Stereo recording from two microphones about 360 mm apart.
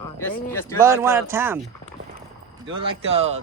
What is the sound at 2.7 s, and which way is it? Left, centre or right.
Speech, centre.